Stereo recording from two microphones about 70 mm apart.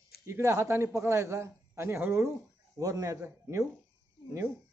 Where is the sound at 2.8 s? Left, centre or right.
Right.